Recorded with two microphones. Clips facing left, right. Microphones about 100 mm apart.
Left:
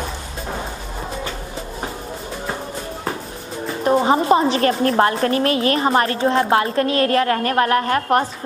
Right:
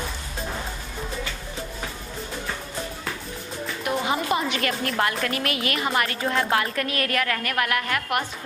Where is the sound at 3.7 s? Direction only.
35° left (ahead or behind).